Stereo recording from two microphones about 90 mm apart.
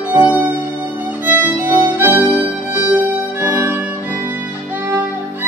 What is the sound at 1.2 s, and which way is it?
Violin, 20° right (ahead or behind).